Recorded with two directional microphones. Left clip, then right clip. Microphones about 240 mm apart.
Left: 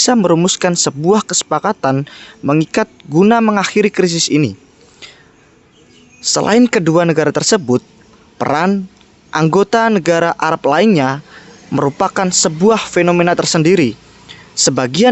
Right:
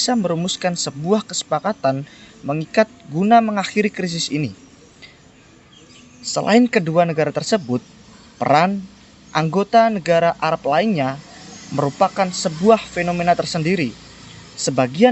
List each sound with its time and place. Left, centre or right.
0.0 s speech: left
6.2 s speech: left